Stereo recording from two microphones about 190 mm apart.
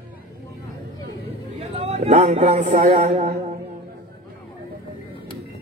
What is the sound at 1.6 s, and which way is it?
A man's voice, 35° right (ahead or behind).